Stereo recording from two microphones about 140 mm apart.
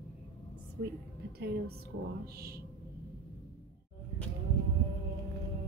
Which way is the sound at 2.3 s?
90° right.